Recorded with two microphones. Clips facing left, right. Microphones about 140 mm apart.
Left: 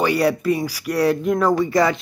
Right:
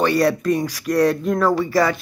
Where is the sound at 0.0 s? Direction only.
10° left (ahead or behind).